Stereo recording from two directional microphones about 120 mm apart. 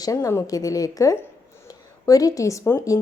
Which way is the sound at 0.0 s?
25° left (ahead or behind).